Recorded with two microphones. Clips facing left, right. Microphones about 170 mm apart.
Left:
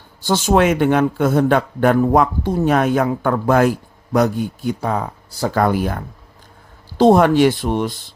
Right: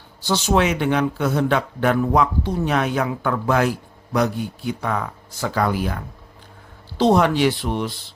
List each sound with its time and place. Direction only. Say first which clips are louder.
0.2 s speech: left 4 dB; 50° left (ahead or behind)
4.8 s speech: left 3 dB; 30° left (ahead or behind)
5.5 s speech: left 4 dB; 50° left (ahead or behind)